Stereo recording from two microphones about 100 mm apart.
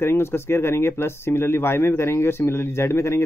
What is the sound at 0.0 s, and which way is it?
Speech, 25° left (ahead or behind).